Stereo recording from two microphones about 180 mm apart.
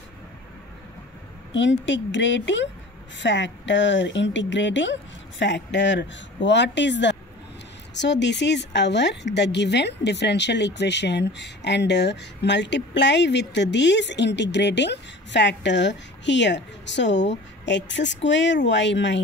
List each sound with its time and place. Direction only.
1.5 s a woman's voice: 90° left